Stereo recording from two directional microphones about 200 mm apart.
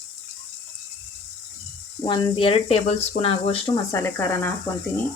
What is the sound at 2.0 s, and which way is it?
Speech, 25° left (ahead or behind).